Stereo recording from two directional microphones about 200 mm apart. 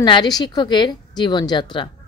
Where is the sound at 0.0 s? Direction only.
20° left (ahead or behind).